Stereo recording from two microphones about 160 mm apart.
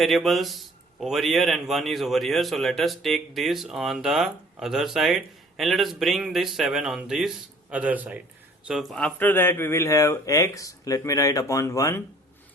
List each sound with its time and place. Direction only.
0.0 s a man's voice: centre (ahead or behind); by 12.0 s 15° left (ahead or behind)